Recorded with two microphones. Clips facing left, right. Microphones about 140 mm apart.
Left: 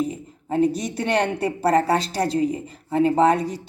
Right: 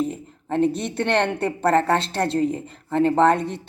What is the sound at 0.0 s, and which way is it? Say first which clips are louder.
A woman's voice: even; 5° left (ahead or behind).